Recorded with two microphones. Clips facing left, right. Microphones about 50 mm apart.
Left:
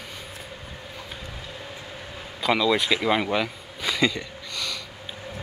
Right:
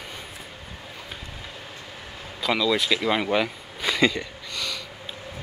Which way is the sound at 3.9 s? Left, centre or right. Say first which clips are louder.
Right 2 dB; centre.